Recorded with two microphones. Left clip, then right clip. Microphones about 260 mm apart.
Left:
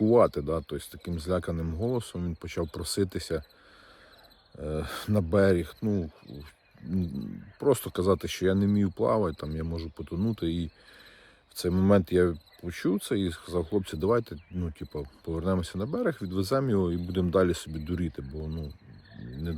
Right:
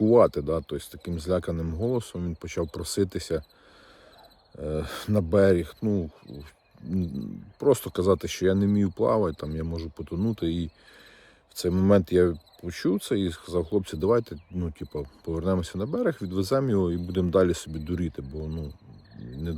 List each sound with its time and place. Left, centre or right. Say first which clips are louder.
0.0 s speech: right 3 dB; centre
4.6 s speech: right 2 dB; centre